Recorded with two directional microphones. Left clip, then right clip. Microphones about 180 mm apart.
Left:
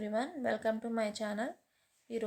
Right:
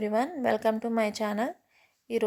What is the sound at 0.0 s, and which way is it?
Speech, 40° right (ahead or behind).